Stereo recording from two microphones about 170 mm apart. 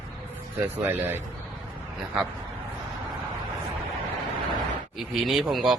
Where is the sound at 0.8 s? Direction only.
10° right (ahead or behind).